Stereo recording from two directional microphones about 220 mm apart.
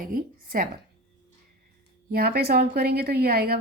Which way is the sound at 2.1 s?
45° right (ahead or behind).